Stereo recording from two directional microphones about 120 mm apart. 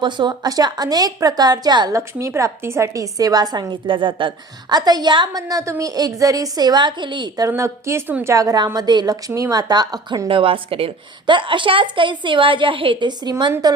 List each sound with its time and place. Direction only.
0.0 s a woman's voice: 40° right (ahead or behind)
2.0 s a woman's voice: 25° right (ahead or behind)
10.2 s a woman's voice: 45° right (ahead or behind)